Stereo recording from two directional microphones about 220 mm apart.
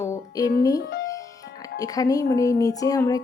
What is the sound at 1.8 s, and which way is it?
Speech, 15° left (ahead or behind).